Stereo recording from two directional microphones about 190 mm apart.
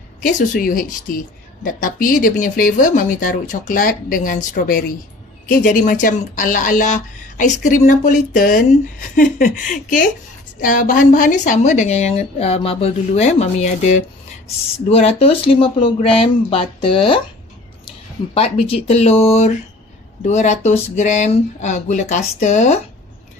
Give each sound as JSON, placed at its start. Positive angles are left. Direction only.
{"t": 0.2, "sound": "a woman's voice", "side_deg": 45}
{"t": 18.3, "sound": "a woman's voice", "side_deg": 30}